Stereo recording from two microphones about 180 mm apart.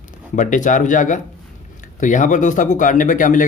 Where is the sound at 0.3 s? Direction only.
45° left (ahead or behind).